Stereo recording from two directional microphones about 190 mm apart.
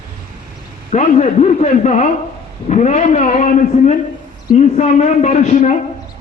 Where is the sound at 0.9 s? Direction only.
40° left (ahead or behind).